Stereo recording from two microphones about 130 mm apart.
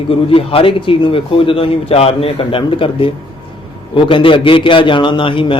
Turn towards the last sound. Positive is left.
turn(degrees=40)  # may be behind; listen again after turning